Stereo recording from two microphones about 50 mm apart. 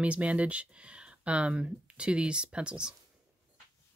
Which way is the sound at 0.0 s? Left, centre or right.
Right.